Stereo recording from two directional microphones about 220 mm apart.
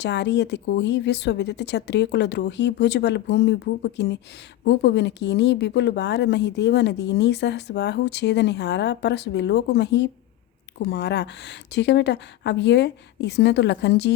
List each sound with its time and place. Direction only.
0.0 s a woman's voice: 50° left (ahead or behind)